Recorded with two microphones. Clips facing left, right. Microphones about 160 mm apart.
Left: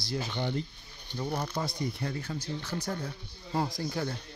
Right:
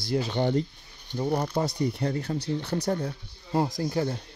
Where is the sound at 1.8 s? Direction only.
35° right (ahead or behind).